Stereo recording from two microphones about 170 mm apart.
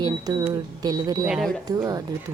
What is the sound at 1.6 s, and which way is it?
Speech, 20° right (ahead or behind).